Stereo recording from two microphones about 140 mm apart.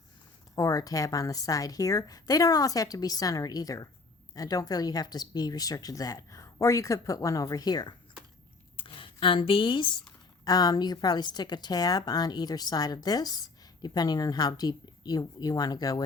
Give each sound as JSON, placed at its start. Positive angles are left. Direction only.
{"t": 0.5, "sound": "speech", "side_deg": 25}
{"t": 8.7, "sound": "a sound", "side_deg": 40}
{"t": 10.4, "sound": "speech", "side_deg": 25}